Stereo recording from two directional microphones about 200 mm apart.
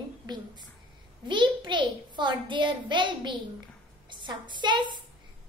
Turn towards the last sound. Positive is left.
turn(degrees=-20)  # may be behind; listen again after turning